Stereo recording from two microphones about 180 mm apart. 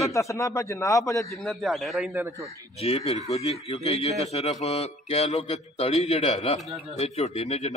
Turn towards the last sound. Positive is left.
turn(degrees=35)  # may be behind; listen again after turning